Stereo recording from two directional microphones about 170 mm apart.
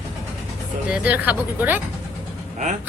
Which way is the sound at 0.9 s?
10° right (ahead or behind).